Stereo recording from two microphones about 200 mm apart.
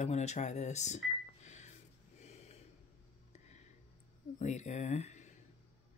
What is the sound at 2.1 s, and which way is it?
Snort, 35° left (ahead or behind).